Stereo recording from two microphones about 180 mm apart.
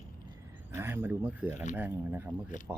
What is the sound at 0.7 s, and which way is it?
Speech, 10° right (ahead or behind).